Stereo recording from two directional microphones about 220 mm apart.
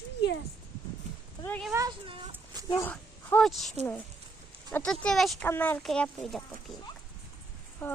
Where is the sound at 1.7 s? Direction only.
20° right (ahead or behind).